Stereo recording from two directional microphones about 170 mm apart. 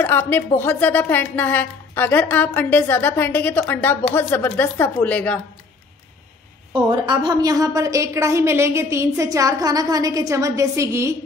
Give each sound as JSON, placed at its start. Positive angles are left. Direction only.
{"t": 0.0, "sound": "speech", "side_deg": 10}
{"t": 6.7, "sound": "a woman's voice", "side_deg": -25}